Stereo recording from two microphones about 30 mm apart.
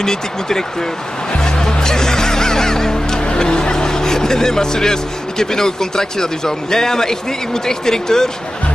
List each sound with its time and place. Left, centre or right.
0.0 s speech: centre
1.4 s music: left
3.3 s speech: left